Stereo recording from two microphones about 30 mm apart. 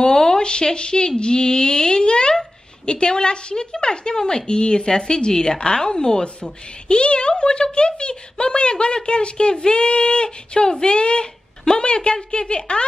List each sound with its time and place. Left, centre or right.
0.0 s speech: left